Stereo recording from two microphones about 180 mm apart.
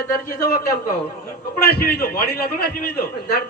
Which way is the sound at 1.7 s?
55° left (ahead or behind).